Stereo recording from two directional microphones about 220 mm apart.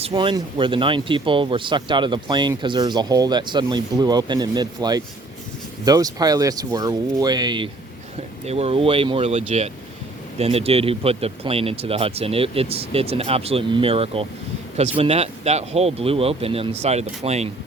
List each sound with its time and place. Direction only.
0.0 s speech: 20° right (ahead or behind)